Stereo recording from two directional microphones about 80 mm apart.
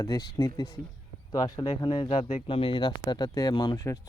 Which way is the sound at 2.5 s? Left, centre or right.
Left.